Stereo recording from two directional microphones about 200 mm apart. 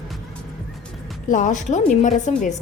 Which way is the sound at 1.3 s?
40° left (ahead or behind).